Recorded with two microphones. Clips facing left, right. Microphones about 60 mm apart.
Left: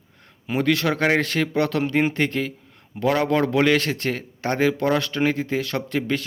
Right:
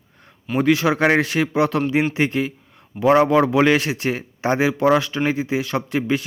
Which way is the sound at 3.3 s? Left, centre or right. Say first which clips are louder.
Right 3 dB; centre.